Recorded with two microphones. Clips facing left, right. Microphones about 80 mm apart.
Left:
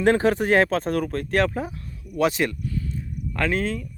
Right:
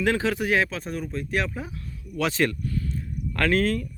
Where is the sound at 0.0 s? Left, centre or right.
Left.